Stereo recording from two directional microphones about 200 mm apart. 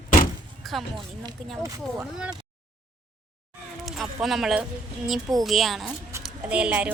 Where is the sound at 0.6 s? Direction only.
Centre (ahead or behind).